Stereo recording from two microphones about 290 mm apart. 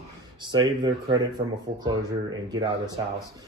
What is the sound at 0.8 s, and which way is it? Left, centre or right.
Speech, centre.